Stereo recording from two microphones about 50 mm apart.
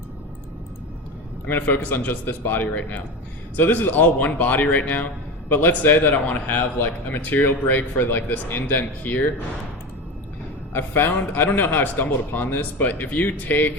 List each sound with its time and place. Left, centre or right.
1.5 s a man's voice: left
10.8 s a man's voice: left